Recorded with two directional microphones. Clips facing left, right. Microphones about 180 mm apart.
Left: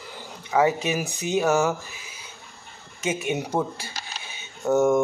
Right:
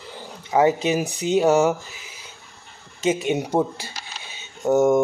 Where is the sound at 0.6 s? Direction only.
25° right (ahead or behind).